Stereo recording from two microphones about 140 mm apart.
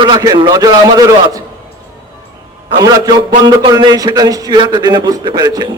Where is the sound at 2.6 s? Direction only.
35° right (ahead or behind).